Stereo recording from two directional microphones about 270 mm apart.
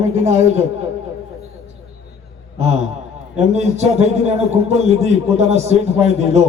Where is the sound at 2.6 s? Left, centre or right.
Right.